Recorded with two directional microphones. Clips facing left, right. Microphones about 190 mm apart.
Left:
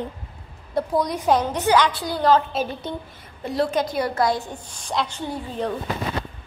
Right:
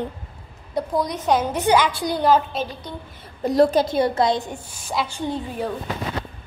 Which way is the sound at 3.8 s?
25° right (ahead or behind).